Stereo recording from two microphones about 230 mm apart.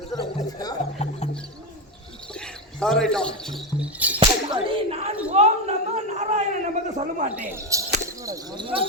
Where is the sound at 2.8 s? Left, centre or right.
Centre.